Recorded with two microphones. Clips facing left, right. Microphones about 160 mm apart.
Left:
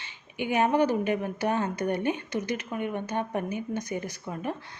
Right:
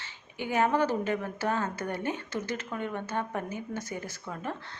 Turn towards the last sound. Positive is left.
turn(degrees=15)  # may be behind; listen again after turning